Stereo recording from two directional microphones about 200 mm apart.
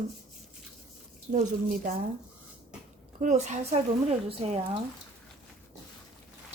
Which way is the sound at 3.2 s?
35° right (ahead or behind).